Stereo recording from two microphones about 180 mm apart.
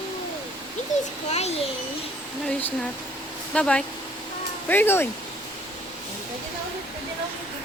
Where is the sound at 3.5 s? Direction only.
5° left (ahead or behind).